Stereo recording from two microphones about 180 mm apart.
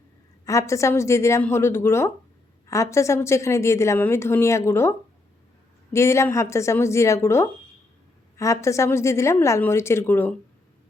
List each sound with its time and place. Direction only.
0.4 s a woman's voice: 15° left (ahead or behind)